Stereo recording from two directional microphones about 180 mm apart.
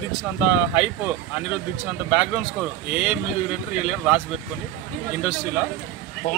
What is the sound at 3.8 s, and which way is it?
Speech, 5° right (ahead or behind).